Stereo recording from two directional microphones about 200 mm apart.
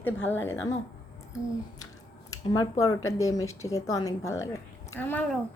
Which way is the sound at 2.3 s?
15° left (ahead or behind).